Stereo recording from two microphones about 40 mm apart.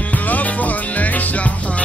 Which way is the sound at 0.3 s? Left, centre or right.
Left.